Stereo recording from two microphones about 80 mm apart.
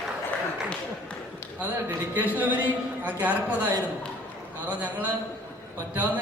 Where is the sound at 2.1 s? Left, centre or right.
Right.